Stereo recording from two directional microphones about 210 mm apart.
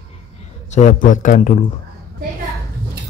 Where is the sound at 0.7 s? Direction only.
35° left (ahead or behind).